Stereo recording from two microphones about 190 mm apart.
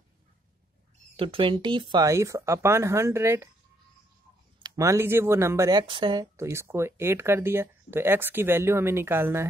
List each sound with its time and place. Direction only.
1.1 s speech: 30° right (ahead or behind)
4.6 s speech: 15° right (ahead or behind)
6.3 s speech: 15° right (ahead or behind)